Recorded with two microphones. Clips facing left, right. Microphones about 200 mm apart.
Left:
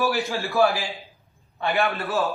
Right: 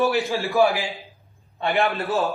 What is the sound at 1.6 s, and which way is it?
Speech, 30° right (ahead or behind).